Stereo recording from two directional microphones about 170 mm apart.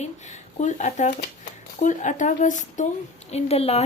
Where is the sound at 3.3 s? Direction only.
35° left (ahead or behind).